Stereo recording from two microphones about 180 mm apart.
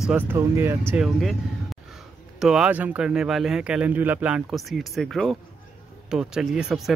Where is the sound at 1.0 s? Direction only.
Centre (ahead or behind).